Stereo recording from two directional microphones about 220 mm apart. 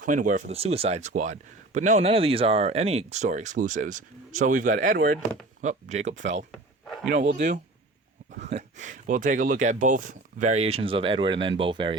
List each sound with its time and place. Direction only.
0.0 s speech: 35° right (ahead or behind)
5.6 s speech: 30° right (ahead or behind)
6.5 s a sound: centre (ahead or behind)
7.3 s speech: 35° right (ahead or behind)